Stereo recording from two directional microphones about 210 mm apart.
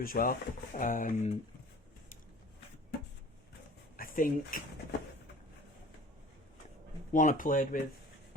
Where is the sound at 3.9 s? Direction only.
40° left (ahead or behind).